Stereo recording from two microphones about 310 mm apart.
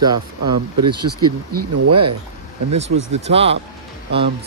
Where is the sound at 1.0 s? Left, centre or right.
Right.